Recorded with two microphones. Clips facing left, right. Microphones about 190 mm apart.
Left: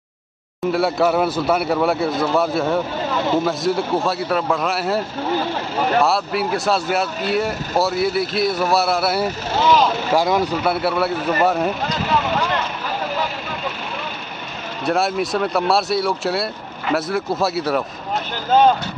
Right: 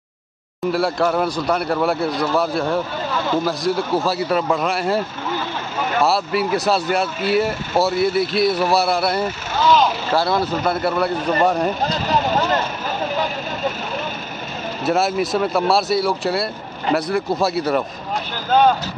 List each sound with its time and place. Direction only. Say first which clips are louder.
0.7 s speech: left 1 dB; centre (ahead or behind)
6.0 s speech: right 1 dB; centre (ahead or behind)
11.8 s vehicle: right 1 dB; 35° right (ahead or behind)
14.9 s speech: right 1 dB; centre (ahead or behind)